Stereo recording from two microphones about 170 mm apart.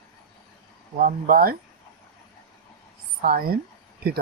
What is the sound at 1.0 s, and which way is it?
Speech, 60° right (ahead or behind).